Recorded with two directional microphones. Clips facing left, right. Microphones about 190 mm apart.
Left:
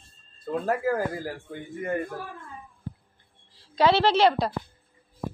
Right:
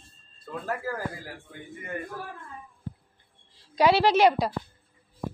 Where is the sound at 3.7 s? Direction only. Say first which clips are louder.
Even; 15° right (ahead or behind).